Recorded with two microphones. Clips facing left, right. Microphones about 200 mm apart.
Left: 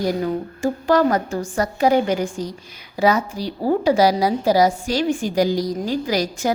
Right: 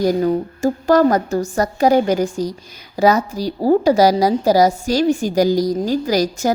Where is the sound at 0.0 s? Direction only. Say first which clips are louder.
Right 5 dB; 40° right (ahead or behind).